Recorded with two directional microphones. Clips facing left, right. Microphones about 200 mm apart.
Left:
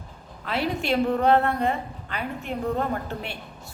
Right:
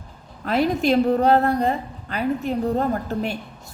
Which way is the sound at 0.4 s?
45° right (ahead or behind).